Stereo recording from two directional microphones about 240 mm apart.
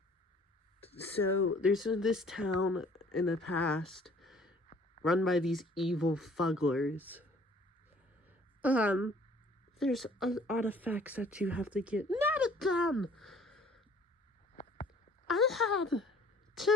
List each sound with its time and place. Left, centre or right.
1.2 s speech: left
1.6 s speech: centre
2.5 s speech: left
3.1 s speech: centre
3.6 s a sound: centre
5.0 s speech: centre
8.6 s speech: centre
14.5 s a sound: left
15.3 s speech: centre